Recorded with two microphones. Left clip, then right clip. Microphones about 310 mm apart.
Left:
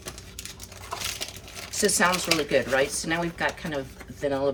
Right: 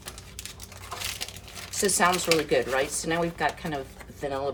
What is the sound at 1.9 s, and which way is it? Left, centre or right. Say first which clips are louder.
A woman's voice: right 2 dB; centre.